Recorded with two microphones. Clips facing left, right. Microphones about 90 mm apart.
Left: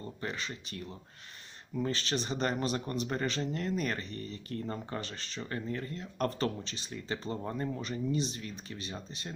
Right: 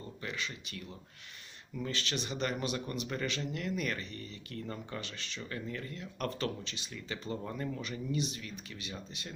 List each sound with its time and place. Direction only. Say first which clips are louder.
0.2 s speech: left 1 dB; 35° left (ahead or behind)